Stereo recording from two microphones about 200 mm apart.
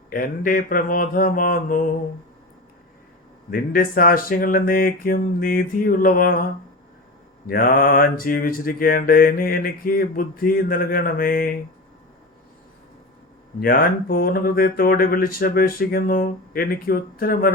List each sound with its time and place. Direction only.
0.1 s mantra: 45° left (ahead or behind)
3.5 s mantra: 45° left (ahead or behind)
13.6 s mantra: 45° left (ahead or behind)